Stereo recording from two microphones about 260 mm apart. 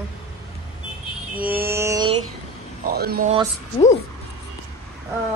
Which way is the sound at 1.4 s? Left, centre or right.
Right.